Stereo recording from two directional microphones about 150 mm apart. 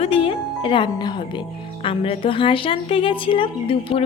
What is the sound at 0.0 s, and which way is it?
Speech, 40° left (ahead or behind).